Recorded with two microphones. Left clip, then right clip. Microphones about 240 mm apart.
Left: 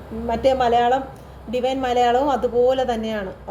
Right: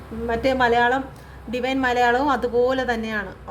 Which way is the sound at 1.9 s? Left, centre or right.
Right.